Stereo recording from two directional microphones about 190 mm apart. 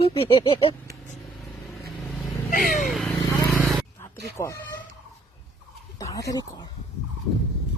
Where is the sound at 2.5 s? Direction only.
45° left (ahead or behind).